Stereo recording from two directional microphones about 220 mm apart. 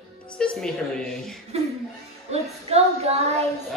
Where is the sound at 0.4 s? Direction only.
5° left (ahead or behind).